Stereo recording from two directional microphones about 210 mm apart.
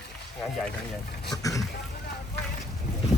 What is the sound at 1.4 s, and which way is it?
Speech, 15° left (ahead or behind).